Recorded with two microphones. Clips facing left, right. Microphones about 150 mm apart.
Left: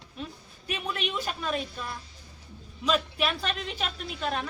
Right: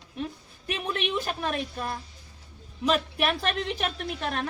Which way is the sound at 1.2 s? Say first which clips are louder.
Right 1 dB; 55° right (ahead or behind).